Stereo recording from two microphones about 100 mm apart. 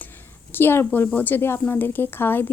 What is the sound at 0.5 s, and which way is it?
A woman's voice, 20° left (ahead or behind).